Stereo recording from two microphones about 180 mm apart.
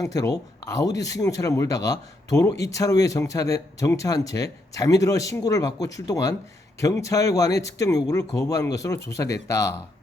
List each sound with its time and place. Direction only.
0.0 s speech: 20° left (ahead or behind)